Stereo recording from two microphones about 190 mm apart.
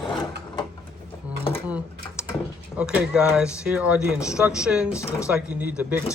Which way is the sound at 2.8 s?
5° right (ahead or behind).